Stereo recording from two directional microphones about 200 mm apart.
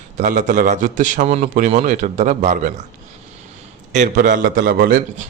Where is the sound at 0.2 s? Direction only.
40° right (ahead or behind).